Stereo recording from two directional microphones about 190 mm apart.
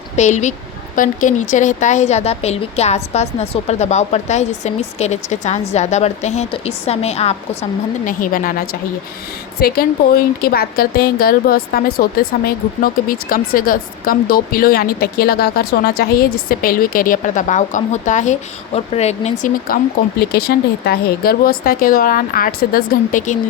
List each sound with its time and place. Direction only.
0.2 s speech: 40° left (ahead or behind)
8.0 s a woman's voice: 45° left (ahead or behind)
20.3 s a woman's voice: 55° left (ahead or behind)